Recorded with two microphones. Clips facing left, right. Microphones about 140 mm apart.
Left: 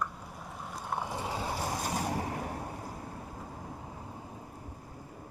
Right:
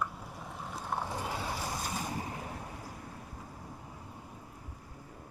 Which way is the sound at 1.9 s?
65° left (ahead or behind).